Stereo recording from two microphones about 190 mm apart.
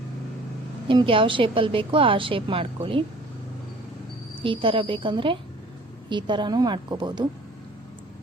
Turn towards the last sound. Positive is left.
turn(degrees=-25)  # may be behind; listen again after turning